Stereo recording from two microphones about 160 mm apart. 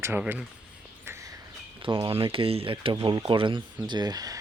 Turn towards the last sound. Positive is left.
turn(degrees=-25)  # may be behind; listen again after turning